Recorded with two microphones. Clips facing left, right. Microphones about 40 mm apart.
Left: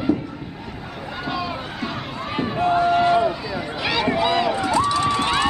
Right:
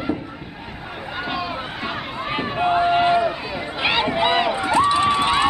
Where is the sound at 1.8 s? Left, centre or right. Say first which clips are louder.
Right 1 dB; right.